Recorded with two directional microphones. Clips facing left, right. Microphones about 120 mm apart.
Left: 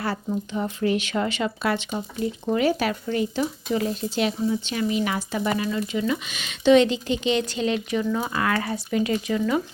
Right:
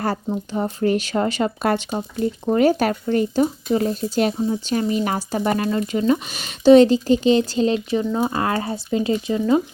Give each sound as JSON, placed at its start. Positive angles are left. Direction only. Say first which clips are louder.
{"t": 0.0, "sound": "speech", "louder": "right 3 dB", "side_deg": -40}